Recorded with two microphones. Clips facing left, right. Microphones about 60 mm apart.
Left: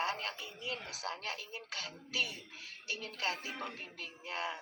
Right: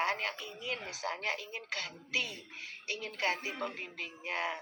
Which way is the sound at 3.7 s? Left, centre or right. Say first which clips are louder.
Right 4 dB; right.